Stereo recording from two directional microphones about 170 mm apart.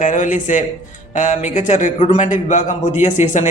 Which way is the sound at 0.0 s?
45° left (ahead or behind).